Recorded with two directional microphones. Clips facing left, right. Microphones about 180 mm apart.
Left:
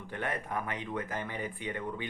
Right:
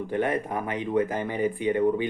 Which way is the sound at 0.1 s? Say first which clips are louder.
Right 8 dB; 20° right (ahead or behind).